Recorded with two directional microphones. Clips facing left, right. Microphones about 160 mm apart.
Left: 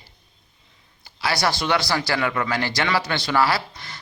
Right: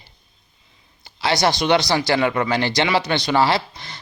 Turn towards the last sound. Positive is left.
turn(degrees=-25)  # may be behind; listen again after turning